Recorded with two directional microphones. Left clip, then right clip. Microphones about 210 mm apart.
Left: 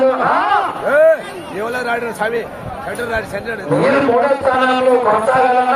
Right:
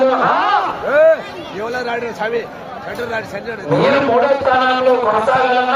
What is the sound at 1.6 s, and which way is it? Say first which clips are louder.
A man's voice: left 2 dB; 20° left (ahead or behind).